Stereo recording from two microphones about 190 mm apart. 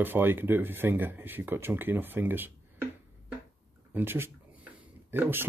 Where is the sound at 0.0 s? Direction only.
10° right (ahead or behind).